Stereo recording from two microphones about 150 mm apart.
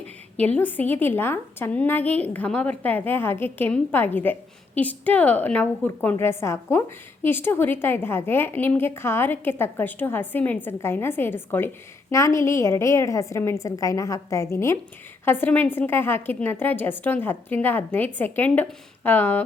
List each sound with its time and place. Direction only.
0.3 s a woman's voice: 10° left (ahead or behind)